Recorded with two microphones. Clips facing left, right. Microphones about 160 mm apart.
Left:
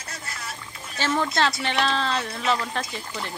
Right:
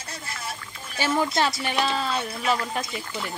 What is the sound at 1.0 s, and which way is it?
A woman's voice, 10° right (ahead or behind).